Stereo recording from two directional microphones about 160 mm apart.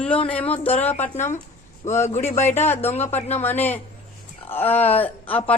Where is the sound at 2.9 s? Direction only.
45° left (ahead or behind).